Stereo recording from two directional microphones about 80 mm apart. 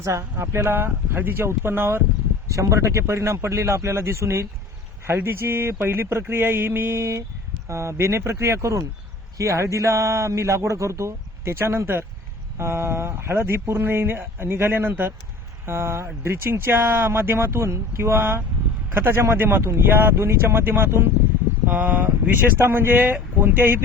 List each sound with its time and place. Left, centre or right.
0.0 s speech: right
2.5 s speech: right